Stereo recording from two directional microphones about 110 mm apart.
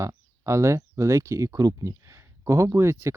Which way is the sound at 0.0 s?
30° right (ahead or behind).